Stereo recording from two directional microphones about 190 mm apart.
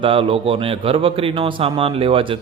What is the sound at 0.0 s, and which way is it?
Speech, 30° right (ahead or behind).